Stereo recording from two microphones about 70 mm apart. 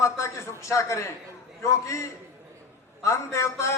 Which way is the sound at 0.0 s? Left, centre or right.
Left.